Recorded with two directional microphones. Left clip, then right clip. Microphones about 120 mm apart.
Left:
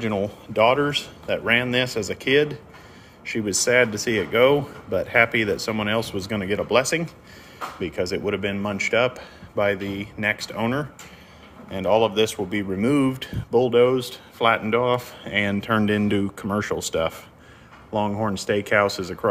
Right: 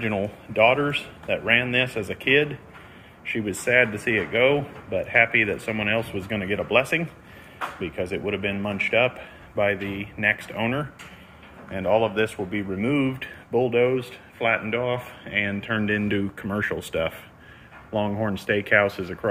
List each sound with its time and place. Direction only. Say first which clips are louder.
0.0 s speech: left 1 dB; 25° left (ahead or behind); by 14.8 s 45° left (ahead or behind)
14.8 s speech: left 5 dB; 60° left (ahead or behind); by 16.3 s 35° left (ahead or behind)
16.3 s speech: left 2 dB; 20° left (ahead or behind)
17.9 s speech: left 2 dB; 15° left (ahead or behind)